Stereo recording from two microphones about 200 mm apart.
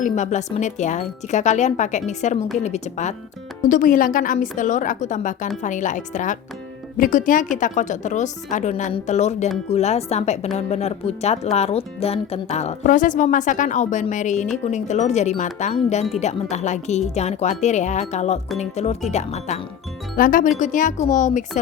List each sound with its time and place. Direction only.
0.0 s speech: 35° left (ahead or behind)